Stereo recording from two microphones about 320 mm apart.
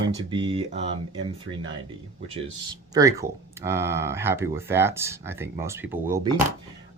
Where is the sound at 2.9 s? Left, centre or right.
Centre.